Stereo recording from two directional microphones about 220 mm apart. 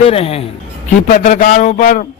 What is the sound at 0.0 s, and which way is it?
A man's voice, 25° left (ahead or behind).